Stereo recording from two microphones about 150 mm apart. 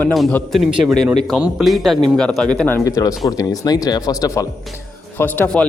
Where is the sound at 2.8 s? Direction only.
25° left (ahead or behind).